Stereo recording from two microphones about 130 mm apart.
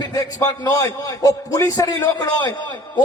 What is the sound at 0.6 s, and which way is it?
A man's voice, 25° left (ahead or behind).